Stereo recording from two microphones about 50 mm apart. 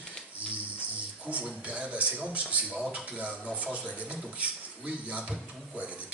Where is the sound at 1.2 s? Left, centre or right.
Right.